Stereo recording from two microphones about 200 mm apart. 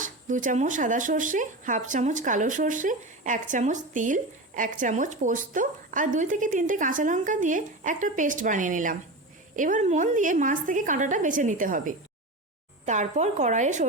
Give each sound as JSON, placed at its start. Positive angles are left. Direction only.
{"t": 0.0, "sound": "speech", "side_deg": -40}